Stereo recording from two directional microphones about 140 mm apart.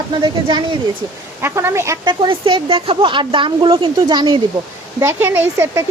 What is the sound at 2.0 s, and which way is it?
Speech, 35° right (ahead or behind).